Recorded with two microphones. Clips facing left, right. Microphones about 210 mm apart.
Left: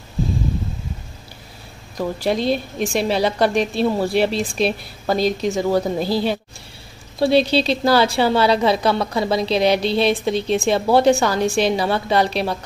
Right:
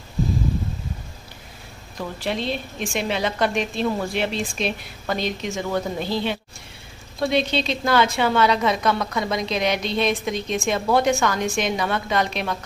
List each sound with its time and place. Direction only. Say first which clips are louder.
2.0 s a woman's voice: left 6 dB; 40° left (ahead or behind)